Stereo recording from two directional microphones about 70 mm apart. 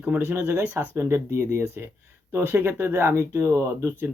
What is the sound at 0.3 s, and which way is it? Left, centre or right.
Speech, right.